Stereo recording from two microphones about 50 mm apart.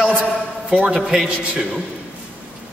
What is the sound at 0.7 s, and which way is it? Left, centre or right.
Speech, centre.